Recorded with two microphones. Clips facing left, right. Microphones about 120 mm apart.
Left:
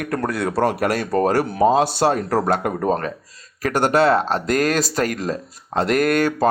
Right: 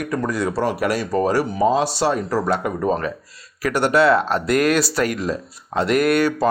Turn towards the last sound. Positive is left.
turn(degrees=45)  # may be behind; listen again after turning